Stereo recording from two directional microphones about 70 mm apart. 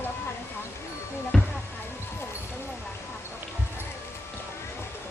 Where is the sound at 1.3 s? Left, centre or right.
Centre.